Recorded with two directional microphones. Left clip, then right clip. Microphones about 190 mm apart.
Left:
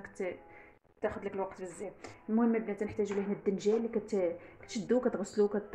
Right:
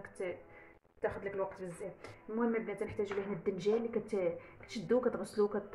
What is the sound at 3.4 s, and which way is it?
A woman's voice, 25° left (ahead or behind).